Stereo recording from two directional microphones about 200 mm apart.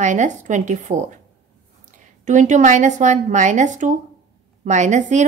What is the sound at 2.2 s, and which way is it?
Speech, 40° right (ahead or behind).